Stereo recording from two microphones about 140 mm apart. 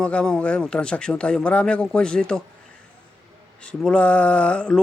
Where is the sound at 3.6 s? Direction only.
10° left (ahead or behind).